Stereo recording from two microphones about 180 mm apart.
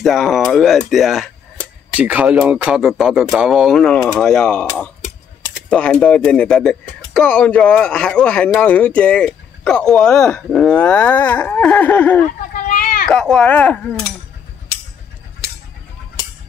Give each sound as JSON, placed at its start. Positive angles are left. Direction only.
{"t": 0.0, "sound": "speech", "side_deg": 0}
{"t": 12.5, "sound": "a sound", "side_deg": 50}
{"t": 13.0, "sound": "speech", "side_deg": 5}